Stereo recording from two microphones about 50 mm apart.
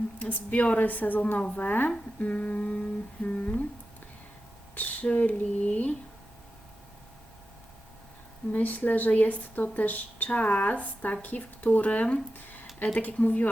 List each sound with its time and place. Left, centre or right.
0.2 s speech: left
2.2 s guitar: left
3.2 s humming: left
4.7 s speech: left
8.5 s speech: left